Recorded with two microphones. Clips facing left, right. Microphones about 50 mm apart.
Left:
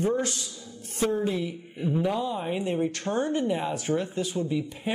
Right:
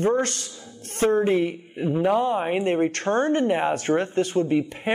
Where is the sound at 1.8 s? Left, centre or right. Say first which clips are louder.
Right 4 dB; right.